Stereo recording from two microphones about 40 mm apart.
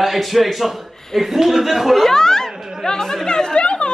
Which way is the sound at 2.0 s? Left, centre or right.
Centre.